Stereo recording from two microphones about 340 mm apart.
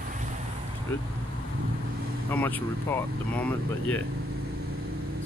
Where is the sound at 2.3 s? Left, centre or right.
Centre.